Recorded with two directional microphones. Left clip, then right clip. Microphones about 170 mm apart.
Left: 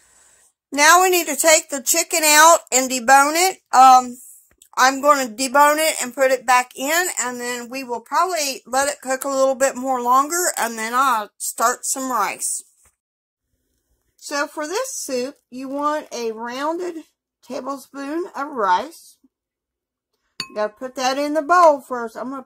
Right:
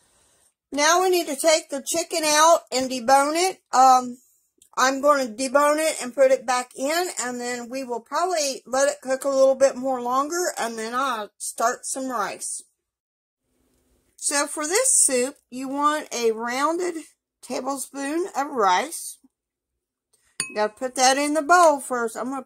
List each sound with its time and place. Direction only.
0.0 s speech: centre (ahead or behind)
14.5 s speech: centre (ahead or behind)
19.2 s a sound: centre (ahead or behind)
20.5 s speech: centre (ahead or behind)